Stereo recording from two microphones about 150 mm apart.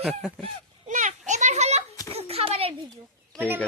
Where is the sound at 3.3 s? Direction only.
15° right (ahead or behind).